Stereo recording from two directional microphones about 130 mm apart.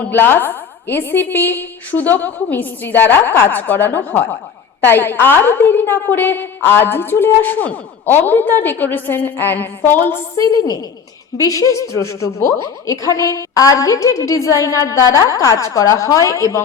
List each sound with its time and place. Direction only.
0.1 s a woman's voice: 15° left (ahead or behind)
11.3 s a woman's voice: 25° left (ahead or behind)